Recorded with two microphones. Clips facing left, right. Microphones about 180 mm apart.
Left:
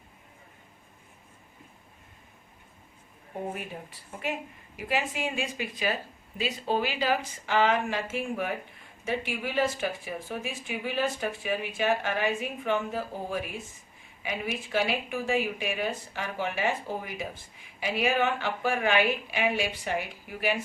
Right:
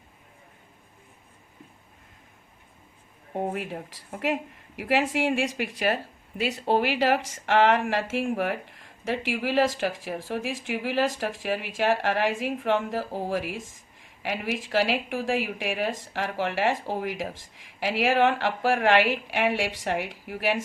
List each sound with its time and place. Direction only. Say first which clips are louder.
3.5 s speech: right 5 dB; 85° right